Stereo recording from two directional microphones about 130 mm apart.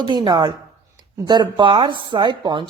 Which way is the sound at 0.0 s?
35° right (ahead or behind).